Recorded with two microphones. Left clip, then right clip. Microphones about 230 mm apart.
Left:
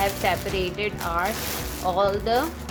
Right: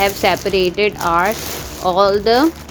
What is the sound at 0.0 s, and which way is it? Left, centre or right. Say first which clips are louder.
Speech: right 8 dB; right.